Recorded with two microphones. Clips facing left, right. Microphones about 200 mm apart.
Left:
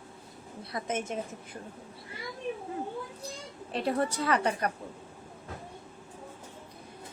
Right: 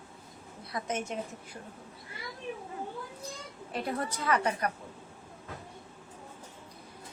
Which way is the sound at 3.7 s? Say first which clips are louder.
Left 5 dB; 30° left (ahead or behind).